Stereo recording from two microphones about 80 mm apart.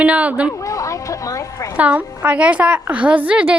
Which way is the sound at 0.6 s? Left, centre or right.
Left.